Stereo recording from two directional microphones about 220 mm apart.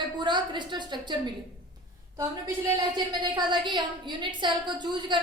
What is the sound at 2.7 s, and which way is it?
A woman's voice, 20° right (ahead or behind).